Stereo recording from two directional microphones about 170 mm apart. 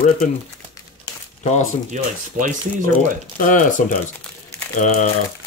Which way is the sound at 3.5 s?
50° left (ahead or behind).